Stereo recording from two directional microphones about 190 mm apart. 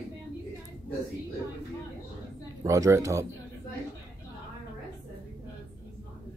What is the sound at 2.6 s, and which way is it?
Speech, 15° right (ahead or behind).